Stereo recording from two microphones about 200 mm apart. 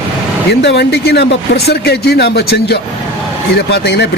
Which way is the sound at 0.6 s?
60° left (ahead or behind).